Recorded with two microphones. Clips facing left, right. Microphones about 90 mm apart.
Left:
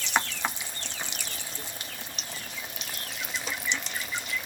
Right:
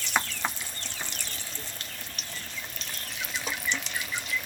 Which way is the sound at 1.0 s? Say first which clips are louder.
Even; 15° left (ahead or behind).